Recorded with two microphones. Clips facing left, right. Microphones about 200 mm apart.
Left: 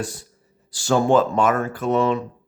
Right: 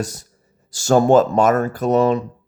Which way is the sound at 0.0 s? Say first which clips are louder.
Right 3 dB; 40° right (ahead or behind).